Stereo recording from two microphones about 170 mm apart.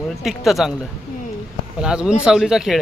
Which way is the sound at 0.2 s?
Centre (ahead or behind).